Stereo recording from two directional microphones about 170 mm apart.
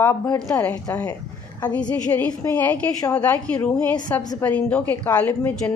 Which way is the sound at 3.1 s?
10° left (ahead or behind).